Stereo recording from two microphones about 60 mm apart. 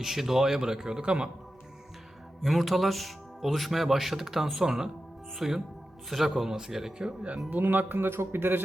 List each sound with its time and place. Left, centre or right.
0.0 s a man's voice: centre
2.4 s a man's voice: centre
7.5 s a man's voice: right